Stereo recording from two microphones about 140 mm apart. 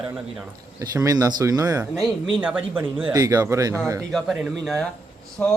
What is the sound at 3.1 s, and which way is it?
Speech, 25° right (ahead or behind).